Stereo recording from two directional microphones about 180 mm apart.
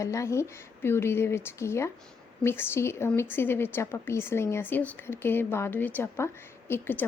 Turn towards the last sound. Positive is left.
turn(degrees=10)  # may be behind; listen again after turning